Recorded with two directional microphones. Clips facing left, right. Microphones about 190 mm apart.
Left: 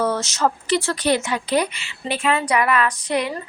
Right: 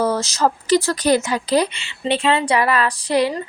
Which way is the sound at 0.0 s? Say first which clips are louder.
Right 2 dB; 35° right (ahead or behind).